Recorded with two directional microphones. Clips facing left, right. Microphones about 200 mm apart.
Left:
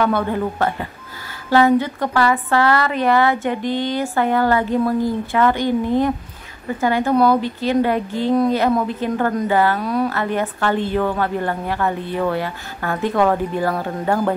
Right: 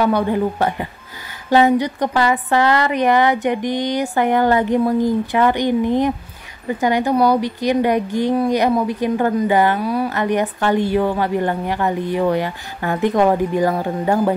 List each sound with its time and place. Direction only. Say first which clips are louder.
0.0 s a woman's voice: right 2 dB; 15° right (ahead or behind)